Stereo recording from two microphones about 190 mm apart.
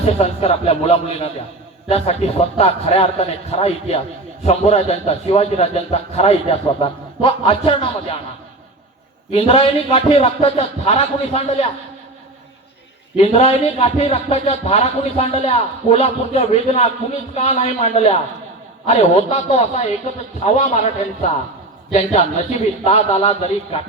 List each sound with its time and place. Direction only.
0.0 s speech: 30° left (ahead or behind)
9.3 s speech: 30° left (ahead or behind)
13.1 s speech: 35° left (ahead or behind)